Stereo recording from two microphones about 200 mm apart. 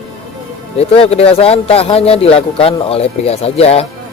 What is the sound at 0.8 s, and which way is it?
Speech, 30° left (ahead or behind).